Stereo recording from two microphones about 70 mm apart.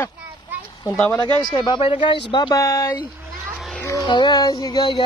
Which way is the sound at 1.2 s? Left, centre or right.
Left.